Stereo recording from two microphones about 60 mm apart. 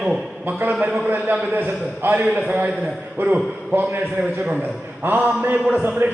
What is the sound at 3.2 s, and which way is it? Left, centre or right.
A man's voice, right.